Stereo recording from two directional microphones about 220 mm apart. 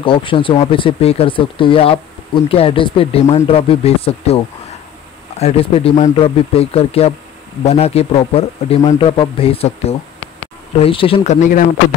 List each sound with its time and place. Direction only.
0.0 s speech: 25° left (ahead or behind)
5.4 s speech: 25° left (ahead or behind)